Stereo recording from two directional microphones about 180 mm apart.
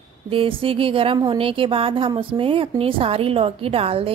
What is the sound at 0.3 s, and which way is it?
A woman's voice, 30° right (ahead or behind).